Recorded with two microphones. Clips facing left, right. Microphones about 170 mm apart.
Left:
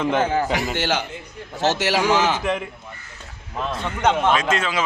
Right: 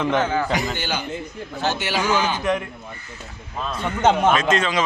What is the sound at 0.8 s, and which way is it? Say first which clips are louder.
A man's voice: left 3 dB; 85° left.